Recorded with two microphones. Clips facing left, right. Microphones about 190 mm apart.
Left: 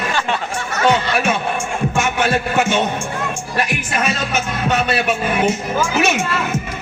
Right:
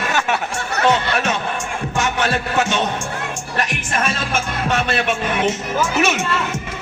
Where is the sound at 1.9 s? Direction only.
15° left (ahead or behind).